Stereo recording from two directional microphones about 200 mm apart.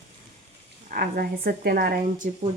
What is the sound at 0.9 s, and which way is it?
A woman's voice, 50° right (ahead or behind).